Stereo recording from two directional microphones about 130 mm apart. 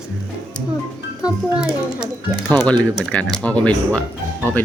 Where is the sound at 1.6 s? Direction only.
5° right (ahead or behind).